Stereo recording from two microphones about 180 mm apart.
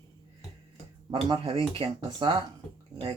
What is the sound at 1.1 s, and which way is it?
Speech, 30° right (ahead or behind).